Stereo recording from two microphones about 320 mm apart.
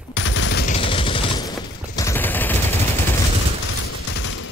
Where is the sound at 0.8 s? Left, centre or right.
Centre.